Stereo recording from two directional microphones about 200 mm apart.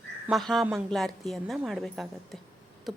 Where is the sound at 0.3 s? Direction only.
Centre (ahead or behind).